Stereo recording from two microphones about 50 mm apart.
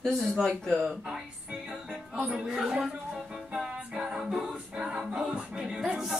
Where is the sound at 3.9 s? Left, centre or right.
Centre.